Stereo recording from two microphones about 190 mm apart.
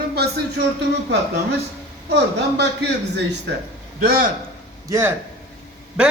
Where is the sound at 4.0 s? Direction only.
55° right (ahead or behind).